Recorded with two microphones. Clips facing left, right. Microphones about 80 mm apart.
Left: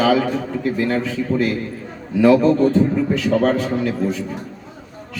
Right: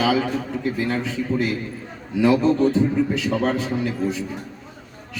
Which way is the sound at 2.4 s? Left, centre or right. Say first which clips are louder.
Left 3 dB; left.